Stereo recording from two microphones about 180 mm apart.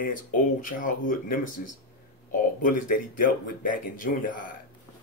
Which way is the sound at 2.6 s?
50° left (ahead or behind).